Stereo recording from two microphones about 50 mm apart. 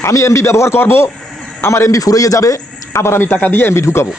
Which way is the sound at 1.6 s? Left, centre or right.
Left.